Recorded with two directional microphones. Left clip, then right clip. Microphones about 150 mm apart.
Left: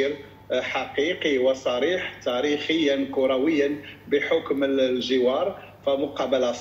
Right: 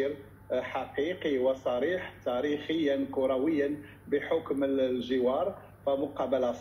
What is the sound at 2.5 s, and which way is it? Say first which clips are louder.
A man's voice: left 7 dB; 10° left (ahead or behind).